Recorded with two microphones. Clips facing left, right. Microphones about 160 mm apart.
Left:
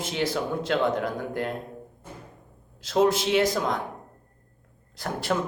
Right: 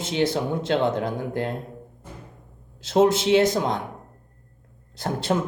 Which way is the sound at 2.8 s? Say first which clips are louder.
Right 3 dB; 25° right (ahead or behind).